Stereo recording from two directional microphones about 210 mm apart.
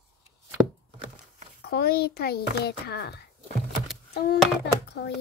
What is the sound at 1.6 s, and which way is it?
Speech, 50° left (ahead or behind).